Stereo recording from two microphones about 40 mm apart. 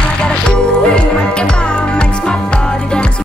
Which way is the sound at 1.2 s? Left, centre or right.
Left.